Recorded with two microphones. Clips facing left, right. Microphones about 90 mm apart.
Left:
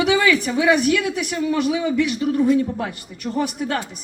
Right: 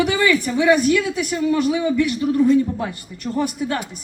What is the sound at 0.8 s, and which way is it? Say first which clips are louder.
Speech: right 1 dB; 70° left (ahead or behind).